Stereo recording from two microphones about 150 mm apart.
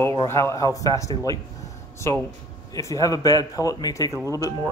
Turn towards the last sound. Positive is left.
turn(degrees=20)  # may be behind; listen again after turning